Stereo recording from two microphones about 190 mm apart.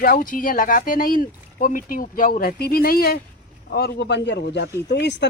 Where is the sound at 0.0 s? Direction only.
50° left (ahead or behind).